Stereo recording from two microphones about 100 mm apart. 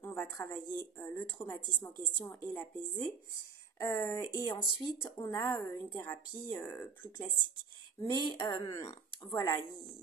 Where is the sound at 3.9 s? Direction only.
30° left (ahead or behind).